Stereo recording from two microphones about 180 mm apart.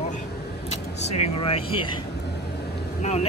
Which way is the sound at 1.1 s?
35° left (ahead or behind).